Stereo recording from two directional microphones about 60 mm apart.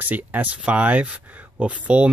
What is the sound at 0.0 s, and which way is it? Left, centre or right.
Speech, right.